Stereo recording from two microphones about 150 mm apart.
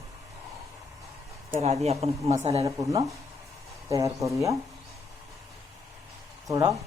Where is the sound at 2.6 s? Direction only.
20° right (ahead or behind).